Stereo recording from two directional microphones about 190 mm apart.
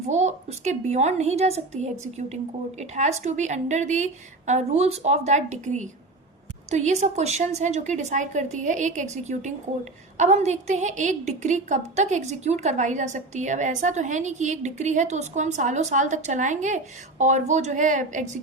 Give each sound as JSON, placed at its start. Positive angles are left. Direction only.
{"t": 0.1, "sound": "a woman's voice", "side_deg": -35}